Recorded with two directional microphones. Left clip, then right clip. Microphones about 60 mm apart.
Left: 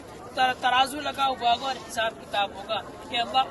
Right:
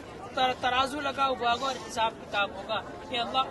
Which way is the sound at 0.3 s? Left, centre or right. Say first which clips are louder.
Left 4 dB; right.